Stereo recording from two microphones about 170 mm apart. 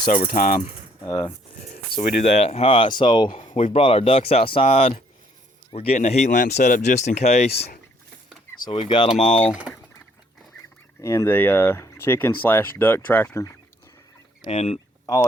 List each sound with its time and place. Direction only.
0.3 s speech: 55° left (ahead or behind)
1.0 s speech: 25° left (ahead or behind)
1.9 s speech: 65° left (ahead or behind)
2.4 s speech: 35° left (ahead or behind)
9.5 s speech: 5° right (ahead or behind)
11.0 s speech: 15° left (ahead or behind)
14.4 s speech: 40° left (ahead or behind)
15.0 s speech: 20° left (ahead or behind)